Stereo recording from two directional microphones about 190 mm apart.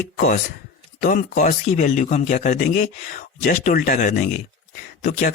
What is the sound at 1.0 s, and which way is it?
Speech, 45° left (ahead or behind).